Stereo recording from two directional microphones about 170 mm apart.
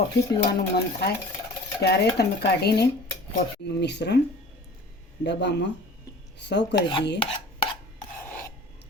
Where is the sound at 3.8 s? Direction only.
90° left.